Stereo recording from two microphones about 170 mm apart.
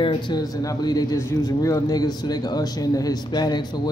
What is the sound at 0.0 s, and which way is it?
A man's voice, 25° left (ahead or behind).